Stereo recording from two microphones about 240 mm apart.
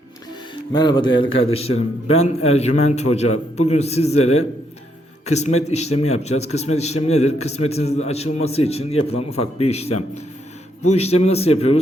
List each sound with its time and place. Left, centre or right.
0.7 s speech: centre
1.3 s speech: left
2.2 s a man's voice: left
5.2 s a man's voice: left